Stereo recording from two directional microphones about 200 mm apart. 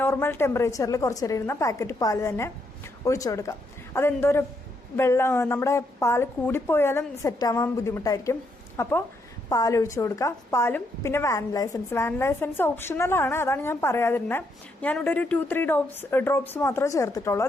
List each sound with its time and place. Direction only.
0.0 s a woman's voice: 10° left (ahead or behind)